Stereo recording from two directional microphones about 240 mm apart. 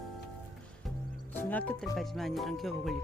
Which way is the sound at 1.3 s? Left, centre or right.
Centre.